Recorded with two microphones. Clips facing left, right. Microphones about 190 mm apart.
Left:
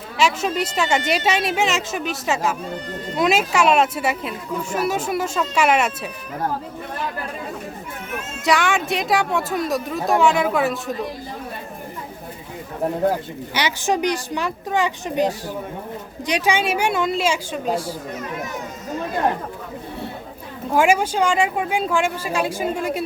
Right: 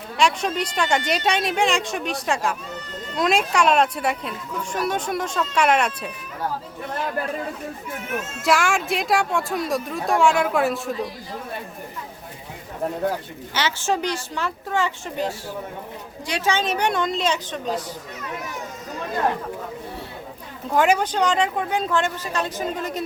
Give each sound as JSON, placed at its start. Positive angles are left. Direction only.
{"t": 0.2, "sound": "speech", "side_deg": 5}
{"t": 8.4, "sound": "speech", "side_deg": 0}
{"t": 13.5, "sound": "speech", "side_deg": 15}
{"t": 20.7, "sound": "speech", "side_deg": 10}